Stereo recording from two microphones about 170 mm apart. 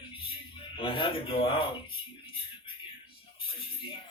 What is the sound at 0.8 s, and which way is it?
Speech, 30° left (ahead or behind).